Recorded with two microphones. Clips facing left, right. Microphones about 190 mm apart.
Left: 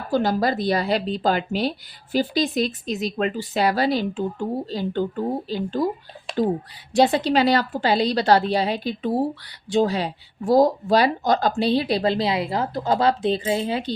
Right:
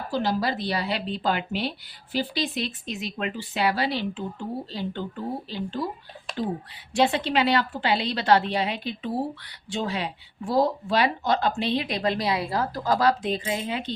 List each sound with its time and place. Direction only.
0.1 s speech: 50° left (ahead or behind)
6.9 s speech: 40° left (ahead or behind)